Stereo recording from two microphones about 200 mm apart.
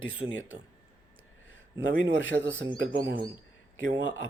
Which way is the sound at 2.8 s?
50° right (ahead or behind).